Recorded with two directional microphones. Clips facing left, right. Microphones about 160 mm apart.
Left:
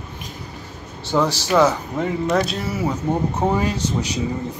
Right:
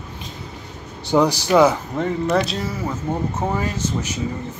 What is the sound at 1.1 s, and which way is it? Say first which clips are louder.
Speech: right 3 dB; 15° right (ahead or behind).